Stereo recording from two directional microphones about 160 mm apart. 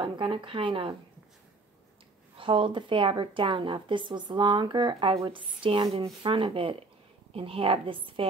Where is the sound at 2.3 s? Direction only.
30° right (ahead or behind).